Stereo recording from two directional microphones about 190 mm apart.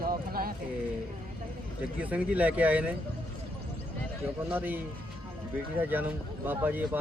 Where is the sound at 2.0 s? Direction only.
10° right (ahead or behind).